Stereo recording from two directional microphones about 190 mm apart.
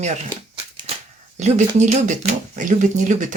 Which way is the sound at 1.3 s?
40° right (ahead or behind).